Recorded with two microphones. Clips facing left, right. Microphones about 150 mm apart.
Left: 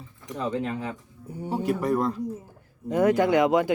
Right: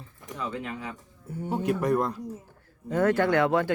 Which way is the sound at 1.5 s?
5° left (ahead or behind).